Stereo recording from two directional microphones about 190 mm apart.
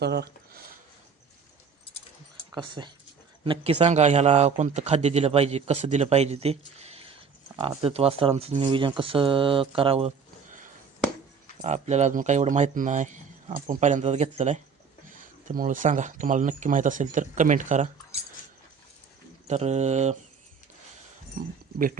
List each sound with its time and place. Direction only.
0.0 s speech: 60° right (ahead or behind)
2.6 s speech: 25° right (ahead or behind)
11.6 s speech: 35° right (ahead or behind)
19.5 s speech: 35° right (ahead or behind)